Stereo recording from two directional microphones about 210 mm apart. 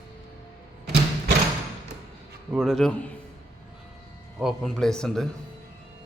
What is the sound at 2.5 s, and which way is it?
Speech, centre (ahead or behind).